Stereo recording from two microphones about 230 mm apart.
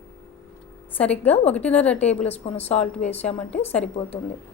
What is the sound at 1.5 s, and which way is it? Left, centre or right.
A woman's voice, centre.